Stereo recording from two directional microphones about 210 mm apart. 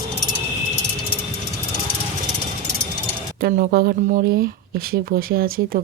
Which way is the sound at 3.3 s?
45° right (ahead or behind).